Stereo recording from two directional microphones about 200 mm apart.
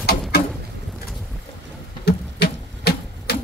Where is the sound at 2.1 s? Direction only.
55° left (ahead or behind).